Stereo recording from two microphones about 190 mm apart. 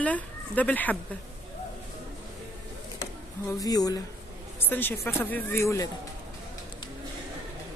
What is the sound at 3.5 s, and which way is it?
A woman's voice, 20° left (ahead or behind).